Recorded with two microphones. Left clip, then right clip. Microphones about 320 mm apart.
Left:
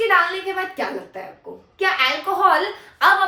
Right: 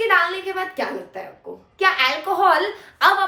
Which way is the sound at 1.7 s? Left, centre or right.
Centre.